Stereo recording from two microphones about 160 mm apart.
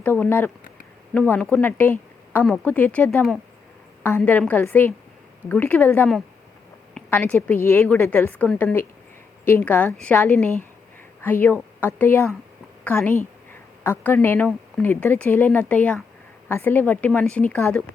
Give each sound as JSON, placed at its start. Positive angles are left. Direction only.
{"t": 0.0, "sound": "a woman's voice", "side_deg": 10}